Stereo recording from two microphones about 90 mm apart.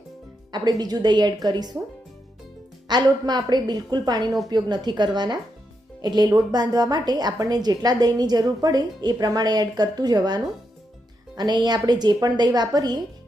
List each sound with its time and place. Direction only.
0.5 s a woman's voice: 50° right (ahead or behind)
2.8 s a woman's voice: 55° right (ahead or behind)